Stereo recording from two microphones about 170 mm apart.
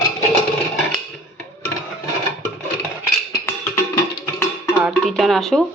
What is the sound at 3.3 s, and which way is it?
Music, 15° left (ahead or behind).